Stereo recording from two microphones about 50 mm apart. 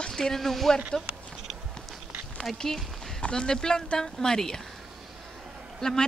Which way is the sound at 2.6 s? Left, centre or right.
Centre.